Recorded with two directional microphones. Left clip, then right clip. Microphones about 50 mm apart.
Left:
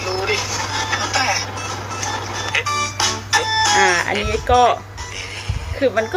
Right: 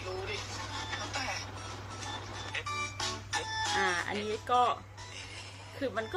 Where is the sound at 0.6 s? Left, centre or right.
Left.